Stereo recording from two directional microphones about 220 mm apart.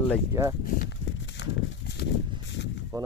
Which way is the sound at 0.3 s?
15° right (ahead or behind).